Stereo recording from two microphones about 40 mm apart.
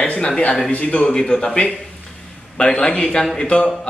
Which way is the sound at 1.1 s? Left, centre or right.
Centre.